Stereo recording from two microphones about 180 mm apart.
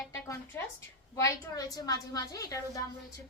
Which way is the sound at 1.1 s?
20° left (ahead or behind).